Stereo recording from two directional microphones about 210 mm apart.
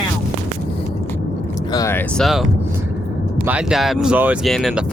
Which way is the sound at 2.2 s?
Centre (ahead or behind).